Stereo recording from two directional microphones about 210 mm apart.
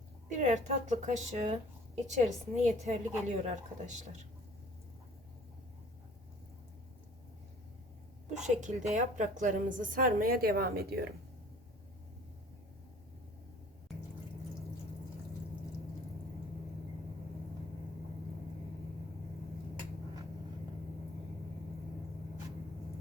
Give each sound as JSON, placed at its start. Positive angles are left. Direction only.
{"t": 0.3, "sound": "a woman's voice", "side_deg": -35}
{"t": 8.3, "sound": "a woman's voice", "side_deg": -35}